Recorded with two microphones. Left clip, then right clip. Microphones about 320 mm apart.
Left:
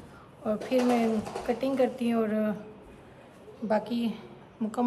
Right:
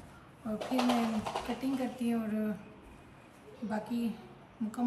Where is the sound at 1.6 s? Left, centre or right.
Centre.